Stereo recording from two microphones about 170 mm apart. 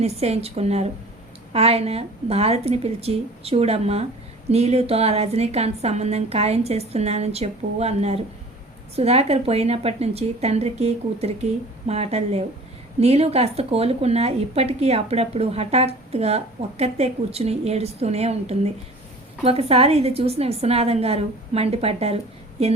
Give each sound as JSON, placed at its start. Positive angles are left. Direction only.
{"t": 0.0, "sound": "speech", "side_deg": -40}